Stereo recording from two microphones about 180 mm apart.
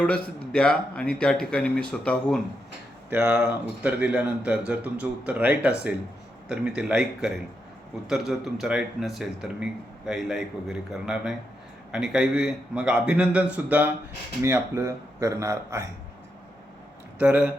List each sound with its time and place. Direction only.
0.0 s speech: 5° left (ahead or behind)
3.1 s speech: 5° right (ahead or behind)
17.2 s speech: 10° right (ahead or behind)